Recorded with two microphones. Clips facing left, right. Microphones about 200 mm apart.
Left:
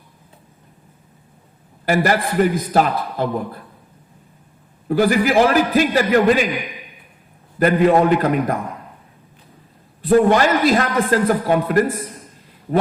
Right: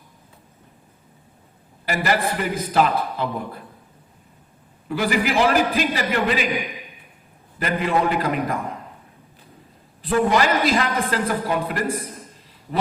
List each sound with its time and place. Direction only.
1.8 s a man's voice: 45° left (ahead or behind)
4.9 s a man's voice: 45° left (ahead or behind)
7.6 s a man's voice: 45° left (ahead or behind)
10.1 s a man's voice: 45° left (ahead or behind)